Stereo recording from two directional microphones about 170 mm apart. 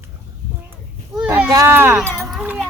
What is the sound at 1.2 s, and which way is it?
Speech, 10° right (ahead or behind).